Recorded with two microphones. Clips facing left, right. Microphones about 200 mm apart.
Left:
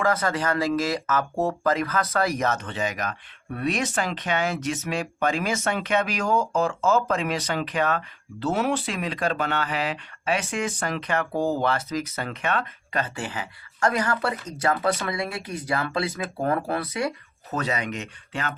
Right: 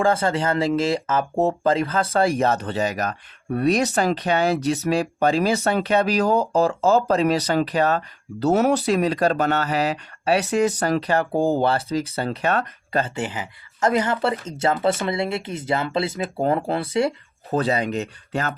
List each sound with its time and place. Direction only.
0.0 s speech: 25° right (ahead or behind)
13.1 s speech: 20° right (ahead or behind); by 18.5 s 40° right (ahead or behind)